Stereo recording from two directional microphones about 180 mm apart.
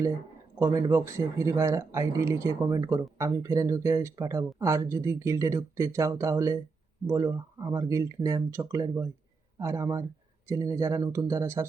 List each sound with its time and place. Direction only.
0.6 s speech: 15° right (ahead or behind)